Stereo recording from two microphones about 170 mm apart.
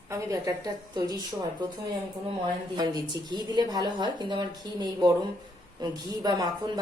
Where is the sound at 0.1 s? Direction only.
20° right (ahead or behind).